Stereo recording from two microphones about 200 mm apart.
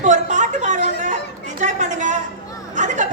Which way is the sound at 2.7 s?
40° right (ahead or behind).